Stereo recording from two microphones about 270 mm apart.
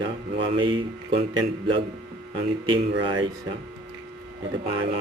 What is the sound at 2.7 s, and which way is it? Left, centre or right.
Speech, centre.